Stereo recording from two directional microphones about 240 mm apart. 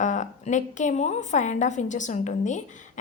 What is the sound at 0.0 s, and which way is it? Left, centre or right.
A woman's voice, left.